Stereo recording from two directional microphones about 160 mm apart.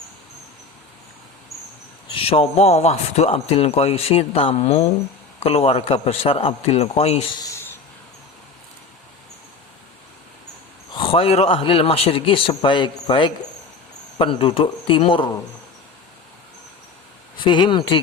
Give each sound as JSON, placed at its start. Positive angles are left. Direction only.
{"t": 2.1, "sound": "a man's voice", "side_deg": 35}
{"t": 10.9, "sound": "a man's voice", "side_deg": 35}
{"t": 17.4, "sound": "speech", "side_deg": 30}